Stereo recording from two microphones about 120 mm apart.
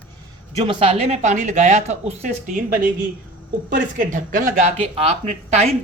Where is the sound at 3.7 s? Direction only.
90° right.